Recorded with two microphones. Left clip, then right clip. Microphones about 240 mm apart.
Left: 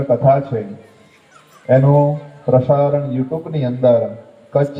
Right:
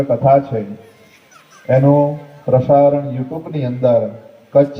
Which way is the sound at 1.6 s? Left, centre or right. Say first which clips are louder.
Even; right.